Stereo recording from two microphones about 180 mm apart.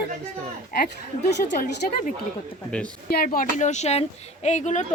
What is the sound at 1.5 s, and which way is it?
A woman's voice, 50° left (ahead or behind).